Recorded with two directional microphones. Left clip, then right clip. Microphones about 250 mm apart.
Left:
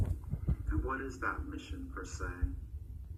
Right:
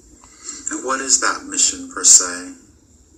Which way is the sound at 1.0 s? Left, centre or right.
Right.